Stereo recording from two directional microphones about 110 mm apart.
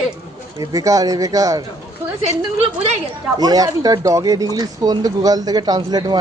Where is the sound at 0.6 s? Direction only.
30° right (ahead or behind).